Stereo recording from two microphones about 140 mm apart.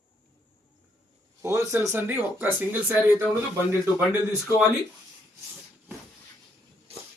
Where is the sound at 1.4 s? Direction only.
20° right (ahead or behind).